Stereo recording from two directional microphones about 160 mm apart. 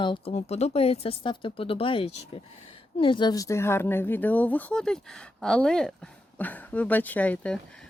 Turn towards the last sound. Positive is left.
turn(degrees=5)  # may be behind; listen again after turning